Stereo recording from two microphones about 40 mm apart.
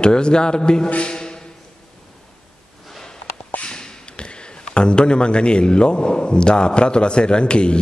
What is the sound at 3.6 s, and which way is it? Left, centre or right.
A man's voice, left.